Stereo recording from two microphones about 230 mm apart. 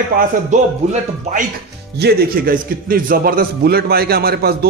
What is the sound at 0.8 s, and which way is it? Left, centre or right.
Speech, right.